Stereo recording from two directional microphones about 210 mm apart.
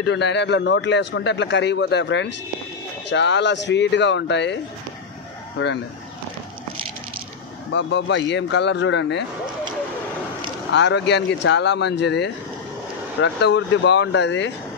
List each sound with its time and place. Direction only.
0.0 s a man's voice: 55° left (ahead or behind)
7.7 s a man's voice: 55° left (ahead or behind)
10.7 s a man's voice: 55° left (ahead or behind)